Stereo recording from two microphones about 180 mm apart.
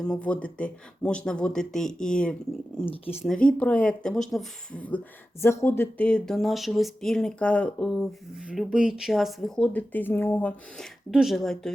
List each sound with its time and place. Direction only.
0.0 s speech: 5° left (ahead or behind)
2.8 s speech: 35° left (ahead or behind)
3.2 s speech: 5° left (ahead or behind)
11.1 s speech: centre (ahead or behind)